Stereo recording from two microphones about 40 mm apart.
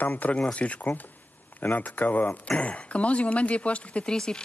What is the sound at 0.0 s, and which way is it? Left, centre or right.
Speech, left.